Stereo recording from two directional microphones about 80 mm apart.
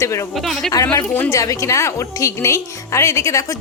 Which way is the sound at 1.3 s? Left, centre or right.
Left.